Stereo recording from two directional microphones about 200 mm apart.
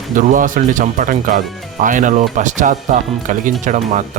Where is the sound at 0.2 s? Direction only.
40° right (ahead or behind).